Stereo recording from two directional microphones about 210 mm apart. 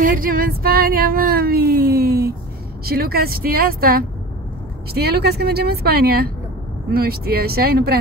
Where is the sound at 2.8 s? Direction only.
45° right (ahead or behind).